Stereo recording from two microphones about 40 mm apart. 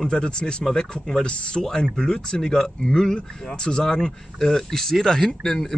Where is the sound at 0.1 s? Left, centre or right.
Left.